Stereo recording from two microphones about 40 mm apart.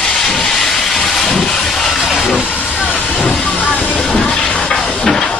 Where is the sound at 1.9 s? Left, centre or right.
Centre.